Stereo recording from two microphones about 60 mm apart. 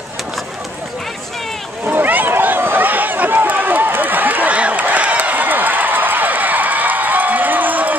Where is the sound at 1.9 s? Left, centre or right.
Right.